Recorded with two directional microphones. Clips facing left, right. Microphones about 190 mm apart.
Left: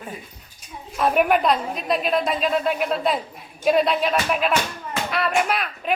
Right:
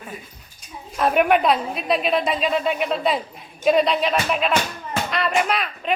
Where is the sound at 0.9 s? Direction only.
Centre (ahead or behind).